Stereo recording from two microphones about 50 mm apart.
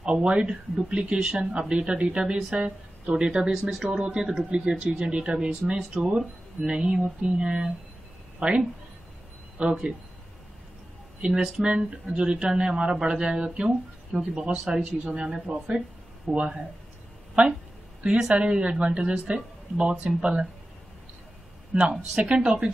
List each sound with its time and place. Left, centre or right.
0.0 s speech: right
3.7 s speech: centre
4.5 s speech: right
11.1 s speech: centre
11.7 s speech: right
21.7 s speech: right